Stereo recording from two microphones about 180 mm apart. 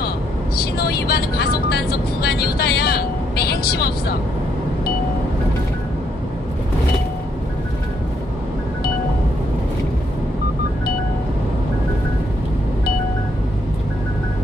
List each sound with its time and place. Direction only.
0.7 s vehicle: 60° left (ahead or behind)